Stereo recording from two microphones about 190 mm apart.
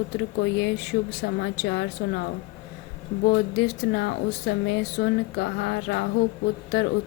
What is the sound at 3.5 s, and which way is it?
Speech, 60° left (ahead or behind).